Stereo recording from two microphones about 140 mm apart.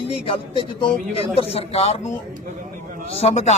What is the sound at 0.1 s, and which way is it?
A man's voice, 45° left (ahead or behind).